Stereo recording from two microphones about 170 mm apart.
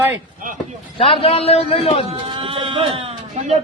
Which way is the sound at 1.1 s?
35° left (ahead or behind).